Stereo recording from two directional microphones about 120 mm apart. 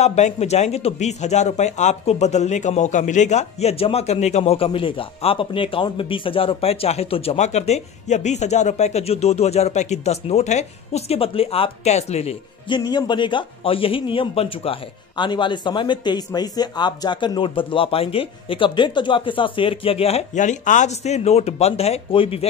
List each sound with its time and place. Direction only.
0.0 s a man's voice: 70° left (ahead or behind)
12.6 s a man's voice: 40° left (ahead or behind)